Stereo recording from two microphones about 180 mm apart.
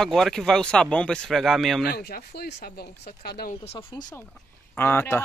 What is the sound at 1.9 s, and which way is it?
Speech, 60° left (ahead or behind).